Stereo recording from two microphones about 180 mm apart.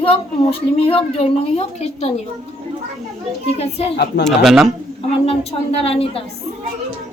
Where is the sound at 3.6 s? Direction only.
35° left (ahead or behind).